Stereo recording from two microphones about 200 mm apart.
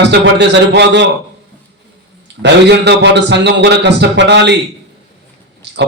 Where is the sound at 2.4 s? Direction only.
60° right (ahead or behind).